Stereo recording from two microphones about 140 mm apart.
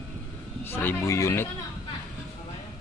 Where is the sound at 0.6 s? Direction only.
15° left (ahead or behind).